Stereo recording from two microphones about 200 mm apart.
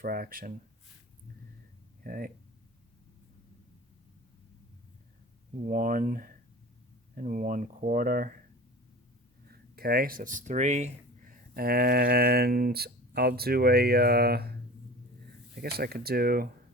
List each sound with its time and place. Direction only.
0.0 s speech: 45° right (ahead or behind)
2.0 s speech: 45° right (ahead or behind)
5.6 s speech: 45° right (ahead or behind)
9.5 s speech: 50° right (ahead or behind)
11.5 s speech: 50° right (ahead or behind)
15.8 s speech: 50° right (ahead or behind)